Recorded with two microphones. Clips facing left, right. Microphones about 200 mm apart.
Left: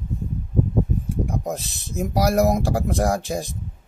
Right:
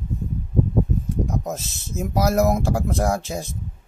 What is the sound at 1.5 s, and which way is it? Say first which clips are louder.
Speech: left 1 dB; 15° left (ahead or behind).